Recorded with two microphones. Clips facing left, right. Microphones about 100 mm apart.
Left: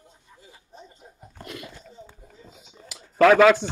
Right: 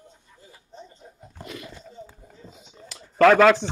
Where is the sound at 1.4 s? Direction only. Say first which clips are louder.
Right 1 dB; centre (ahead or behind).